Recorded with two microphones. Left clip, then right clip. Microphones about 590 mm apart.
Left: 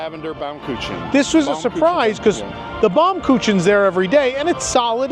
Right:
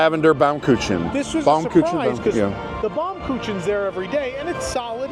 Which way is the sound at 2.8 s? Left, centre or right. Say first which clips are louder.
Left 11 dB; left.